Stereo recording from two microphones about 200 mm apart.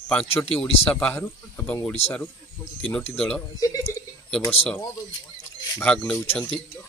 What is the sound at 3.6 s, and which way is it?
Speech, 15° left (ahead or behind).